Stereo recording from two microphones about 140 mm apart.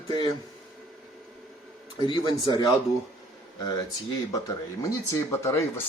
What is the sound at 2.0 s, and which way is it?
Speech, 30° left (ahead or behind).